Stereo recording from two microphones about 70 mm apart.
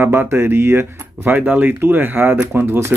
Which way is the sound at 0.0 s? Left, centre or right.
Right.